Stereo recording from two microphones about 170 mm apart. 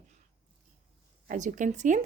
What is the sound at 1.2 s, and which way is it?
Speech, 45° right (ahead or behind).